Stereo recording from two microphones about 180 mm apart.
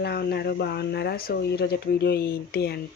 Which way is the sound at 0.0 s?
65° left (ahead or behind).